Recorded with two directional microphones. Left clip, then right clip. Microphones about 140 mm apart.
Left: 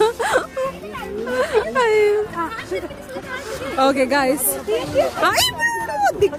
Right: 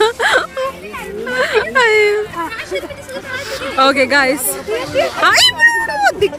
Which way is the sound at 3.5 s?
10° left (ahead or behind).